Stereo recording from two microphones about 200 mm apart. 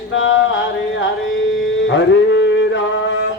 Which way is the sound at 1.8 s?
65° left (ahead or behind).